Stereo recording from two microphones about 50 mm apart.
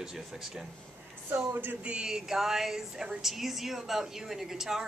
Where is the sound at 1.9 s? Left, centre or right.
Centre.